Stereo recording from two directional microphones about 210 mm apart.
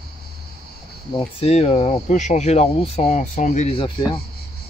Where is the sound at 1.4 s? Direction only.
30° left (ahead or behind).